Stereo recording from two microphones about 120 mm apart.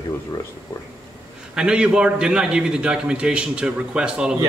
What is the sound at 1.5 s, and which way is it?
A man's voice, 5° right (ahead or behind).